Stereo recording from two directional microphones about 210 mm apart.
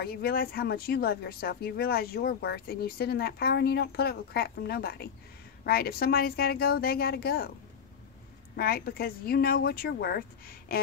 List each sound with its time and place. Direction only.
0.0 s speech: 45° left (ahead or behind)
8.5 s speech: 45° left (ahead or behind)